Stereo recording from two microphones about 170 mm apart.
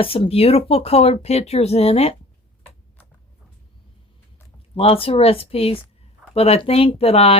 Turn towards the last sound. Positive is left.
turn(degrees=35)  # may be behind; listen again after turning